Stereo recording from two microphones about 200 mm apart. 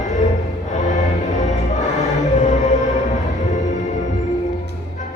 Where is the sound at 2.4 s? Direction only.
35° left (ahead or behind).